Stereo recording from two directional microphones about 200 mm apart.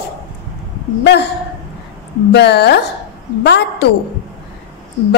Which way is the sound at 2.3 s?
60° left (ahead or behind).